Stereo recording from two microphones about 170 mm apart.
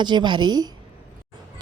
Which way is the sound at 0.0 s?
25° right (ahead or behind).